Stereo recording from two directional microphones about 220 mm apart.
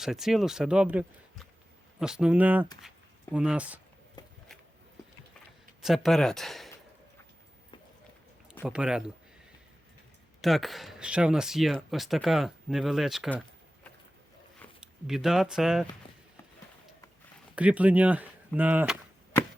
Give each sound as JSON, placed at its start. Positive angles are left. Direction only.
{"t": 0.0, "sound": "speech", "side_deg": 0}
{"t": 4.2, "sound": "a sound", "side_deg": 20}
{"t": 5.8, "sound": "speech", "side_deg": 0}
{"t": 8.6, "sound": "speech", "side_deg": -5}
{"t": 10.4, "sound": "speech", "side_deg": 0}
{"t": 14.8, "sound": "speech", "side_deg": 0}
{"t": 17.5, "sound": "speech", "side_deg": -5}